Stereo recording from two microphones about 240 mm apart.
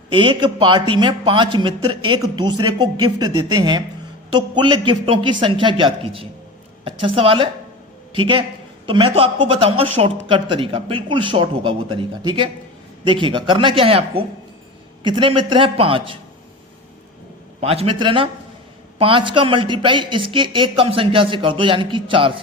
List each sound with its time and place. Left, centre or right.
0.1 s speech: centre
17.6 s speech: right